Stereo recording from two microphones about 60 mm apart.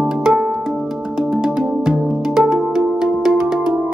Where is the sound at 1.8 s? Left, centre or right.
Centre.